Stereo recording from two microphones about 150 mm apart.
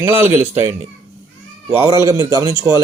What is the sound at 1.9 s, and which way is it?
Speech, 25° right (ahead or behind).